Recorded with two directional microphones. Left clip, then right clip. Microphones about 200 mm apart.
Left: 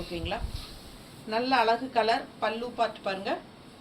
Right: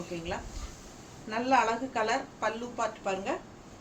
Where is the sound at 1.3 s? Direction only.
15° right (ahead or behind).